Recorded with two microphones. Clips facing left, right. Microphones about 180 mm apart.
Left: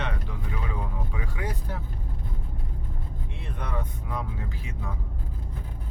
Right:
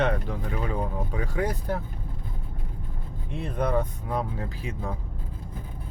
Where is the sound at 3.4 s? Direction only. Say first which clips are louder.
Right 10 dB; 40° right (ahead or behind).